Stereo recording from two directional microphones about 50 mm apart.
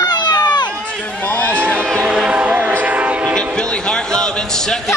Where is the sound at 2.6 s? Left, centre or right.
Right.